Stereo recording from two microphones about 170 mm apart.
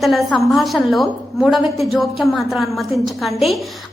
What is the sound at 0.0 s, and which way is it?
A woman's voice, centre (ahead or behind).